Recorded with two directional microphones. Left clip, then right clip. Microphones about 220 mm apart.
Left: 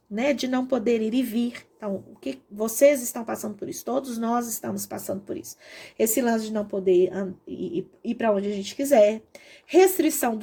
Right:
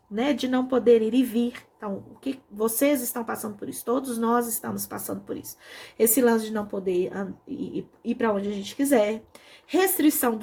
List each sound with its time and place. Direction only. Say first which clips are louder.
0.1 s speech: left 1 dB; 40° left (ahead or behind)